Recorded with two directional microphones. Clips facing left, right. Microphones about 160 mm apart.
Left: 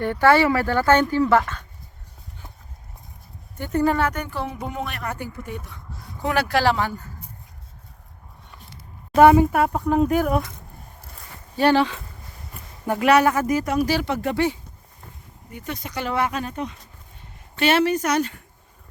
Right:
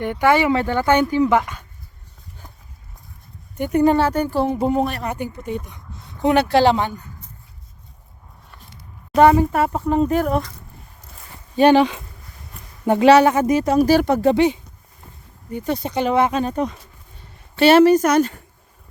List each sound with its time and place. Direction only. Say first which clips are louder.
0.0 s speech: even; 15° right (ahead or behind)
3.6 s speech: right 5 dB; 15° right (ahead or behind)
3.9 s speech: right 6 dB; 30° right (ahead or behind)
5.0 s speech: right 5 dB; 20° right (ahead or behind)
9.1 s speech: even; 10° left (ahead or behind)
11.5 s speech: right 5 dB; 20° right (ahead or behind)
13.7 s speech: right 7 dB; 45° right (ahead or behind)
14.2 s speech: right 7 dB; 25° right (ahead or behind)
15.5 s speech: right 9 dB; 30° right (ahead or behind)
17.6 s speech: right 8 dB; 40° right (ahead or behind)